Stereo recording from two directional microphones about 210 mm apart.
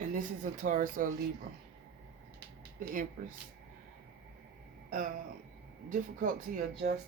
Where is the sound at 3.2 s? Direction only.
40° right (ahead or behind).